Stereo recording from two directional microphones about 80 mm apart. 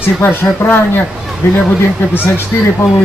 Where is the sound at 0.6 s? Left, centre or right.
Left.